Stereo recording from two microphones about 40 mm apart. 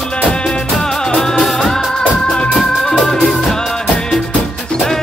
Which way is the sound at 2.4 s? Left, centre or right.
Centre.